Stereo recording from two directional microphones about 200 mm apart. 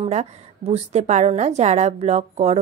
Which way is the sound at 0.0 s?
30° right (ahead or behind).